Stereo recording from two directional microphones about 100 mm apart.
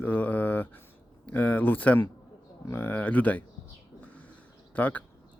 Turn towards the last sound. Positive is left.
turn(degrees=15)  # may be behind; listen again after turning